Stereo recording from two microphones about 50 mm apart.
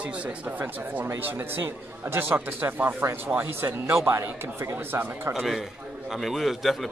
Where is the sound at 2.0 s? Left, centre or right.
Right.